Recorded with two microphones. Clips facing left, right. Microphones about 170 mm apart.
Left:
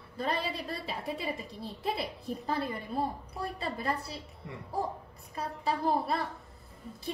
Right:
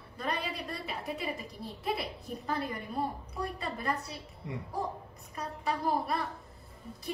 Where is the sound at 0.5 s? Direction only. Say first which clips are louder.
Left 1 dB; 30° left (ahead or behind).